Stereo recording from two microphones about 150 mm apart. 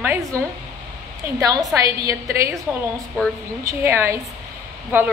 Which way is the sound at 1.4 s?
25° right (ahead or behind).